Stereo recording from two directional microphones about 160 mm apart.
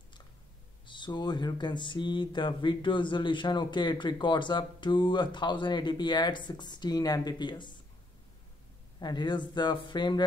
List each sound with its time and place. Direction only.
0.8 s speech: 30° left (ahead or behind)
9.0 s speech: 25° left (ahead or behind)